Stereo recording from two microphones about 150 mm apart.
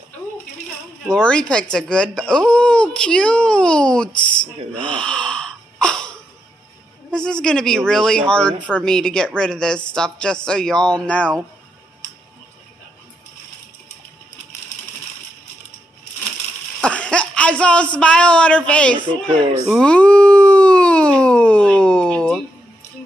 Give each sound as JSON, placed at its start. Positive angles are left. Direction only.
{"t": 1.0, "sound": "speech", "side_deg": 5}
{"t": 4.1, "sound": "speech", "side_deg": 30}
{"t": 4.7, "sound": "gasp", "side_deg": 5}
{"t": 7.1, "sound": "speech", "side_deg": 5}
{"t": 16.8, "sound": "a sound", "side_deg": 5}
{"t": 17.9, "sound": "speech", "side_deg": 5}
{"t": 19.7, "sound": "a sound", "side_deg": 5}